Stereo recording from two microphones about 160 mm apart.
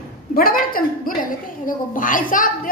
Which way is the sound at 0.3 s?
65° left (ahead or behind).